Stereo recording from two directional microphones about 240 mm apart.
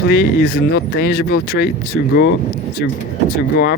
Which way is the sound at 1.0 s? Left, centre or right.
Left.